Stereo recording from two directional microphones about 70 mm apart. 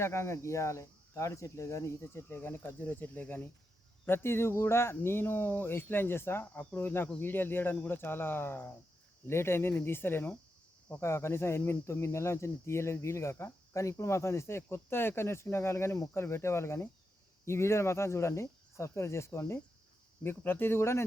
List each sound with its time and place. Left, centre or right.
0.0 s speech: left